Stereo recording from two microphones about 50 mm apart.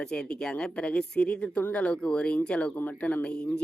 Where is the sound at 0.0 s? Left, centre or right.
Centre.